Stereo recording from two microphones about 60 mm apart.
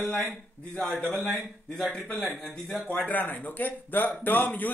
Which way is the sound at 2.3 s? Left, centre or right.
Centre.